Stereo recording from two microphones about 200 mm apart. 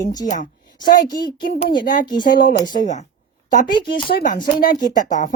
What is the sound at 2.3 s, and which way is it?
Speech, 45° left (ahead or behind).